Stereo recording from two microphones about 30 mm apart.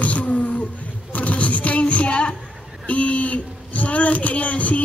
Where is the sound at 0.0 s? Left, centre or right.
Left.